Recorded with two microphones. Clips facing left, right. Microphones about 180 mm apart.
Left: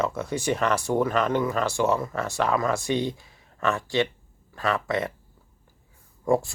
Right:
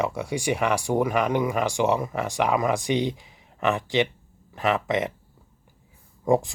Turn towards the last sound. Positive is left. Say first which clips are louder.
# right 1 dB
turn(degrees=-15)  # may be behind; listen again after turning